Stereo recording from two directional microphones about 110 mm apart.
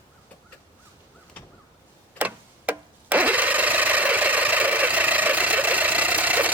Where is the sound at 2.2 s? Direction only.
15° right (ahead or behind).